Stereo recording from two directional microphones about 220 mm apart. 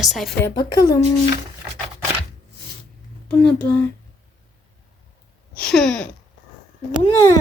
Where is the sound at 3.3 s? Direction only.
5° left (ahead or behind).